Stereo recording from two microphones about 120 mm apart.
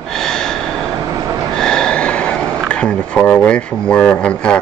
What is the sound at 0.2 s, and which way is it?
Snort, 5° left (ahead or behind).